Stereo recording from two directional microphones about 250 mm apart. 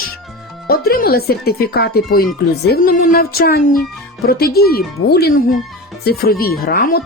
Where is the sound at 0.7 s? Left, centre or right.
Left.